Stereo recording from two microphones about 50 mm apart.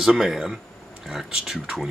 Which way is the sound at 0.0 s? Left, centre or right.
Centre.